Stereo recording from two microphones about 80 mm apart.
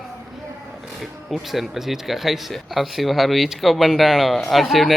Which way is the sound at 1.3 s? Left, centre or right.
Centre.